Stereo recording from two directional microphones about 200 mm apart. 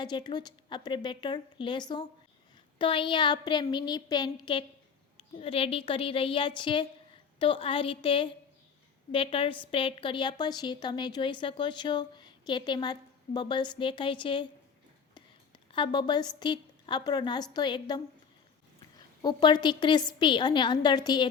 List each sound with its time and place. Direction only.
0.0 s a woman's voice: 20° left (ahead or behind)
19.2 s a woman's voice: 20° left (ahead or behind)